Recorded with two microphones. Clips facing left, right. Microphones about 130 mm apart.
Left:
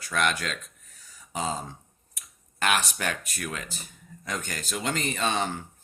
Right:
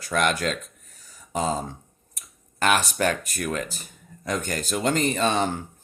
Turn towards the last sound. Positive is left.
turn(degrees=-40)  # may be behind; listen again after turning